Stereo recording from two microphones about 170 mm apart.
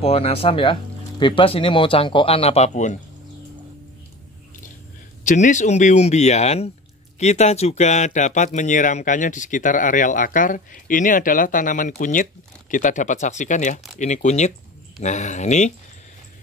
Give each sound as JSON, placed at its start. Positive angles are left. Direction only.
{"t": 0.0, "sound": "speech", "side_deg": 35}
{"t": 5.2, "sound": "speech", "side_deg": 45}